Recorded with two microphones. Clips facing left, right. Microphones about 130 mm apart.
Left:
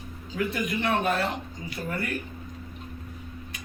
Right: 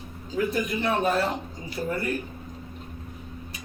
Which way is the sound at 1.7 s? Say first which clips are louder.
Right 4 dB; 35° right (ahead or behind).